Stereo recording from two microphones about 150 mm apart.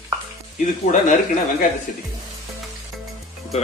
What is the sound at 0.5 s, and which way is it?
Speech, 55° left (ahead or behind).